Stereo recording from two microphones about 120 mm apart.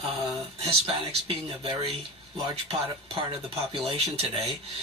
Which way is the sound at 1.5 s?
50° right (ahead or behind).